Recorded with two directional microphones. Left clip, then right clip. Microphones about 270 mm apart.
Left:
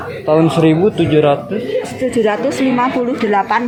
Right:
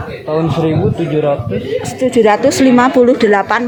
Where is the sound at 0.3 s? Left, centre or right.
Centre.